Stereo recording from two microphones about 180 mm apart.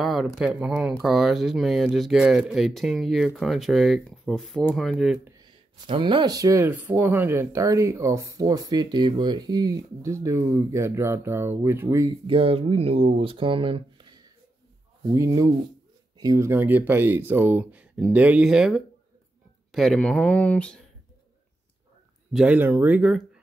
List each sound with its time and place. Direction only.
0.0 s a sound: centre (ahead or behind)
0.4 s speech: 5° right (ahead or behind)
5.4 s speech: 25° right (ahead or behind)
12.3 s speech: 30° right (ahead or behind); by 20.8 s 5° left (ahead or behind)
22.3 s speech: 5° right (ahead or behind)